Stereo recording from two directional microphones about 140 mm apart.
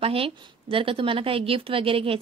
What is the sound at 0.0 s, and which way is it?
A woman's voice, 40° right (ahead or behind).